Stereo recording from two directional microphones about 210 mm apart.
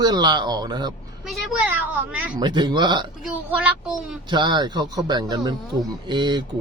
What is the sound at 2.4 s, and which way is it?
Speech, 20° right (ahead or behind).